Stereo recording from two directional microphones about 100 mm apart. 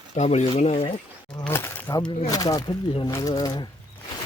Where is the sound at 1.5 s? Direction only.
25° left (ahead or behind).